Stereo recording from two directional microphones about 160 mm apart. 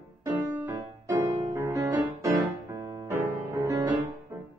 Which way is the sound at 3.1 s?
20° right (ahead or behind).